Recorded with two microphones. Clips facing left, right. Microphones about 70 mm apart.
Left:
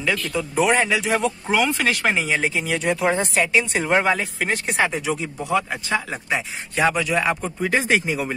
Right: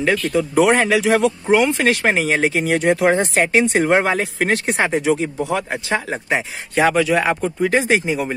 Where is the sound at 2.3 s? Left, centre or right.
Right.